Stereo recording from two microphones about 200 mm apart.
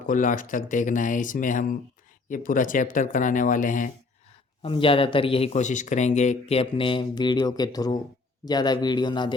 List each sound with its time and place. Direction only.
0.1 s speech: 40° left (ahead or behind)
4.6 s speech: 25° left (ahead or behind)